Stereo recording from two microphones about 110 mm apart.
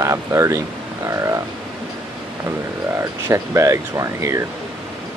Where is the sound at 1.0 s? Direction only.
25° right (ahead or behind).